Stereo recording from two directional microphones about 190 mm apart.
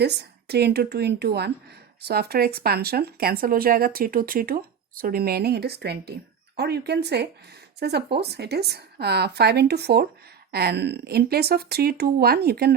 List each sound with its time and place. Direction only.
0.0 s speech: 60° right (ahead or behind)